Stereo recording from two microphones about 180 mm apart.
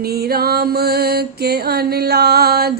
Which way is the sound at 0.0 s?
60° right (ahead or behind).